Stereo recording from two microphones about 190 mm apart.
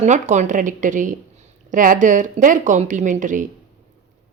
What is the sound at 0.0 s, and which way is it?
A woman's voice, 40° right (ahead or behind).